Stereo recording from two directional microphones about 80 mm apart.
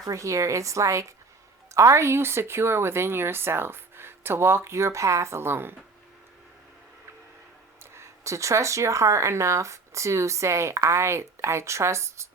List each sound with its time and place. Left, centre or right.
0.0 s speech: right
7.9 s speech: right